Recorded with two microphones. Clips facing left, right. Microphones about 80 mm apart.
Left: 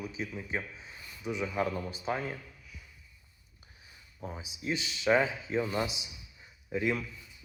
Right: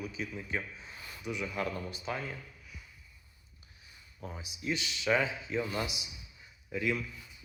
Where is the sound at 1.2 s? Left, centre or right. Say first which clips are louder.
Left 4 dB; left.